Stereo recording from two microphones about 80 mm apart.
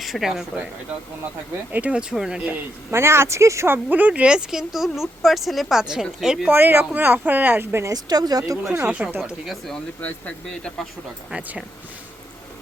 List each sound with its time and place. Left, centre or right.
0.0 s speech: centre
1.7 s speech: centre
2.9 s speech: right
3.8 s speech: centre
6.5 s speech: right
7.9 s speech: right
9.0 s speech: centre
9.7 s speech: centre
10.5 s speech: centre
11.3 s speech: centre